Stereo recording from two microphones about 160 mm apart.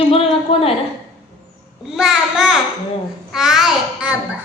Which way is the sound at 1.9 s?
5° right (ahead or behind).